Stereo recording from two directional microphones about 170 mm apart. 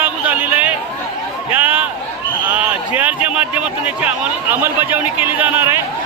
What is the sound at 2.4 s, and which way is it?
Speech, 10° right (ahead or behind).